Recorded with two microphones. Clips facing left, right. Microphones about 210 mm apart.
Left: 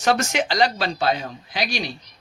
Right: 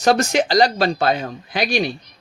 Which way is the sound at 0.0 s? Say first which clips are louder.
Right 5 dB; 35° right (ahead or behind).